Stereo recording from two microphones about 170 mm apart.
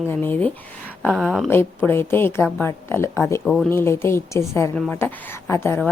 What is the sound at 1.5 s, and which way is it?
A woman's voice, 15° left (ahead or behind).